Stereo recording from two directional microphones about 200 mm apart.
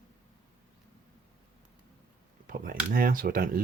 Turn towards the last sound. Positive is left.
turn(degrees=-45)  # may be behind; listen again after turning